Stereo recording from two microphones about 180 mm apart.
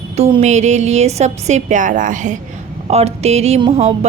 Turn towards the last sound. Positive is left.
turn(degrees=-35)  # may be behind; listen again after turning